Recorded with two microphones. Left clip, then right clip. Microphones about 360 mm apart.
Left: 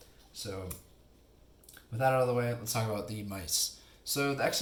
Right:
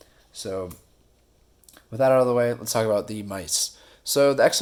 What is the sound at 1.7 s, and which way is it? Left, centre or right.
Speech, right.